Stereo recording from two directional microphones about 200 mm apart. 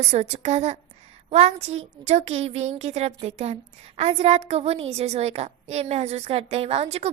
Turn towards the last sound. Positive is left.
turn(degrees=-30)  # may be behind; listen again after turning